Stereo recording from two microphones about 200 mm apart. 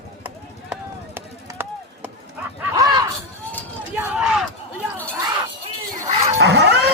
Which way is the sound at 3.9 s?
5° right (ahead or behind).